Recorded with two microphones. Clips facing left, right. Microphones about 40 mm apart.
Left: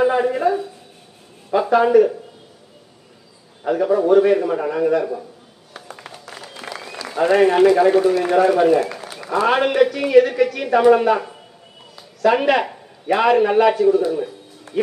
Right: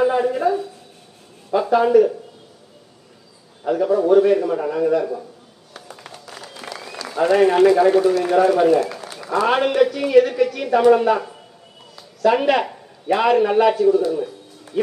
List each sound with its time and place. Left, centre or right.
0.0 s a sound: centre
1.5 s speech: centre
3.6 s a man's voice: centre
5.7 s applause: centre
8.1 s a man's voice: centre
11.9 s a sound: centre
13.0 s a man's voice: centre